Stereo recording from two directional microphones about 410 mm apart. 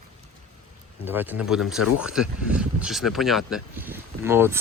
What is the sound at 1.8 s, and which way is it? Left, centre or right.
Speech, left.